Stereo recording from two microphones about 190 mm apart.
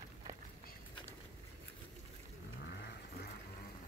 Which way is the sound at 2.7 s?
60° left (ahead or behind).